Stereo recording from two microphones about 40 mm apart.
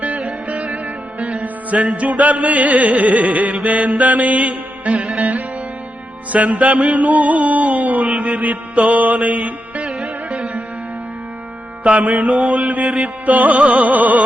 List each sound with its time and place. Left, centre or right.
0.4 s music: right
1.8 s music: right
6.3 s music: right
8.8 s mantra: right
10.0 s music: centre
11.8 s music: right